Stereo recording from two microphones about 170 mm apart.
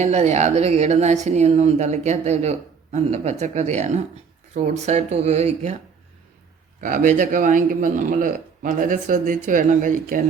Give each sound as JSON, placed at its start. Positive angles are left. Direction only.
{"t": 0.0, "sound": "a woman's voice", "side_deg": -40}
{"t": 6.8, "sound": "a man's voice", "side_deg": -50}